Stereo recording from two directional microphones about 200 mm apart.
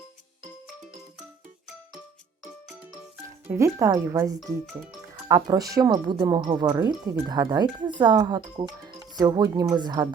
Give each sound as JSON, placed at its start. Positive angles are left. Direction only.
{"t": 3.2, "sound": "speech", "side_deg": -15}
{"t": 4.4, "sound": "speech", "side_deg": 0}
{"t": 5.1, "sound": "speech", "side_deg": -20}